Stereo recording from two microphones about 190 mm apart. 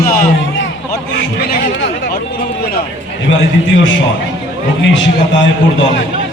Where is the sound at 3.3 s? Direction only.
80° left.